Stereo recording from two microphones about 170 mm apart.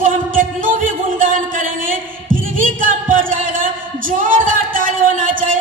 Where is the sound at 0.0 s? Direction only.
50° right (ahead or behind).